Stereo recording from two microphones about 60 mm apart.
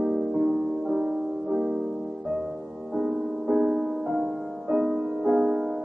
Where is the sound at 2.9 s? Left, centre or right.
Centre.